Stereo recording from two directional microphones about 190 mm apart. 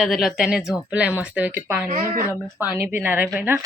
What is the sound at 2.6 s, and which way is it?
Speech, 10° right (ahead or behind).